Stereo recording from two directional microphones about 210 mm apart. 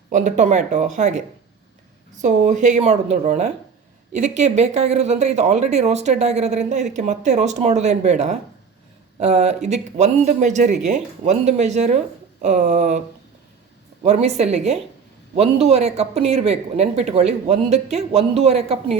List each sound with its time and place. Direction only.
0.1 s speech: 35° right (ahead or behind)
14.0 s speech: 30° right (ahead or behind)